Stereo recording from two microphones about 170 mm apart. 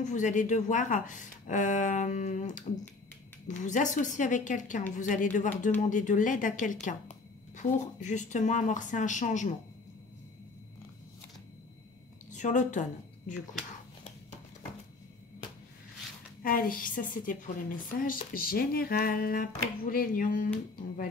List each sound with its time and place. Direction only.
0.0 s speech: 45° left (ahead or behind)
12.3 s speech: 45° left (ahead or behind)
16.4 s a woman's voice: 55° left (ahead or behind)